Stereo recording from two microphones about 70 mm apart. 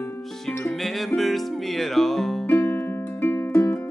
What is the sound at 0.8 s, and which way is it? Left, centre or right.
Music, centre.